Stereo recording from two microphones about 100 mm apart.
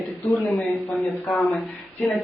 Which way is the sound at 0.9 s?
15° left (ahead or behind).